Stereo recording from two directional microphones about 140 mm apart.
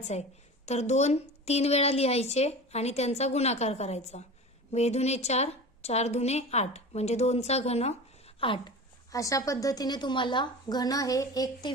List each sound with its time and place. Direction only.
0.0 s a woman's voice: 50° left (ahead or behind)
8.4 s speech: 40° left (ahead or behind)
9.1 s a woman's voice: 25° left (ahead or behind)